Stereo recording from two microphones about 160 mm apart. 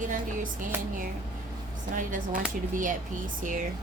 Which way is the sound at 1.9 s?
55° right (ahead or behind).